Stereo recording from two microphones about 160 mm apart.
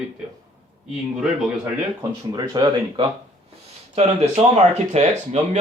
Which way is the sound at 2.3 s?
25° right (ahead or behind).